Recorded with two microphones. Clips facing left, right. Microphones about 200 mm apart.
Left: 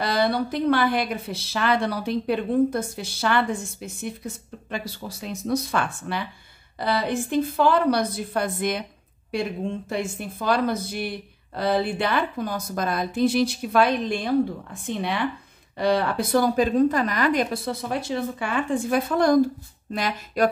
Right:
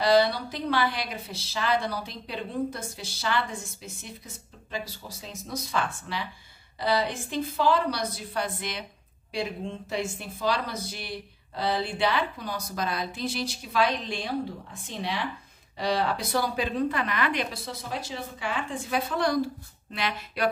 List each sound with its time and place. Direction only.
0.0 s a woman's voice: 55° left (ahead or behind)